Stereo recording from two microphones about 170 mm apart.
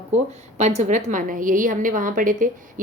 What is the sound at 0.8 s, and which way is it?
A woman's voice, 45° right (ahead or behind).